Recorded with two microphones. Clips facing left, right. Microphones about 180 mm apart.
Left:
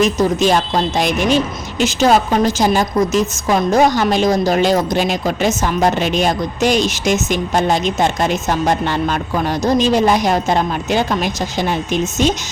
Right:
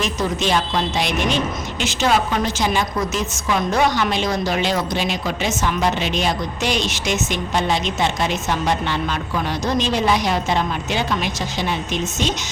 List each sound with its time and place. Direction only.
0.0 s a woman's voice: 45° left (ahead or behind)